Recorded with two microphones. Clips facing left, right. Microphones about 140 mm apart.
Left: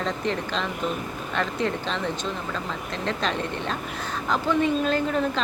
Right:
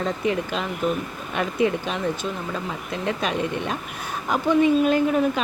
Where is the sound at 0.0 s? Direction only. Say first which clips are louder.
Right 3 dB; 10° right (ahead or behind).